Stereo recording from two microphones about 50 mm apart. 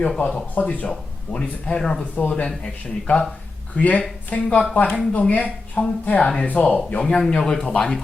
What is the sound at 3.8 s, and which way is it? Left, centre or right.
A woman's voice, left.